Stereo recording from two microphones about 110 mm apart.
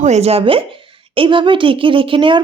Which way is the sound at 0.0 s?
80° right.